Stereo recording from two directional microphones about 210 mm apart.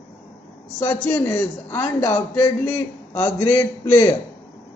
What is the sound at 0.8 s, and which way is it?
A man's voice, 10° left (ahead or behind).